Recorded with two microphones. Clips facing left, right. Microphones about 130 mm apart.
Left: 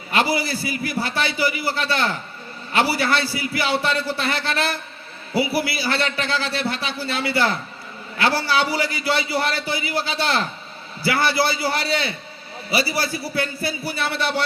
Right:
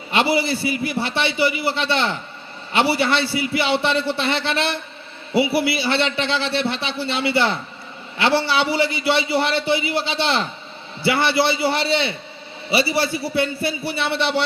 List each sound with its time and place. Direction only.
0.1 s a man's voice: 25° right (ahead or behind)